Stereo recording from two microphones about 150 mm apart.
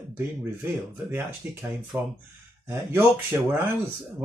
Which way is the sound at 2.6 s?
15° right (ahead or behind).